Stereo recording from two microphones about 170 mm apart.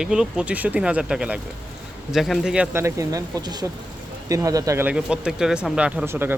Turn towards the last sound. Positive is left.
turn(degrees=-10)  # may be behind; listen again after turning